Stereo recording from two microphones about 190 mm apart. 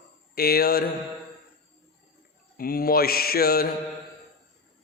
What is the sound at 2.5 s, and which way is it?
Mantra, 50° left (ahead or behind).